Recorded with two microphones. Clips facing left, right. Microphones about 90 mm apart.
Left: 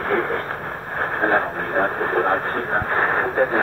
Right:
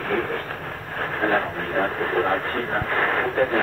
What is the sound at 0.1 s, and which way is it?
Radio, 35° left (ahead or behind).